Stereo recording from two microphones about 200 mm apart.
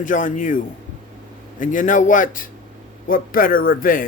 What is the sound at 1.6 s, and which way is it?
A man's voice, 40° left (ahead or behind).